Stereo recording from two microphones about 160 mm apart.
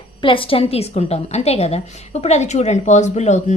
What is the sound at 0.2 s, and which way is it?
A woman's voice, 35° left (ahead or behind).